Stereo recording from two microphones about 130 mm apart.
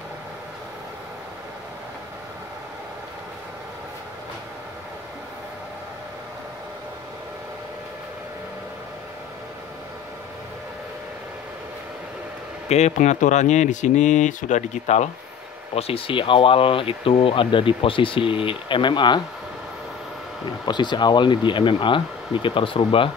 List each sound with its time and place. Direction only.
12.6 s speech: 60° left (ahead or behind)
15.7 s speech: 45° left (ahead or behind)
20.6 s speech: 35° left (ahead or behind)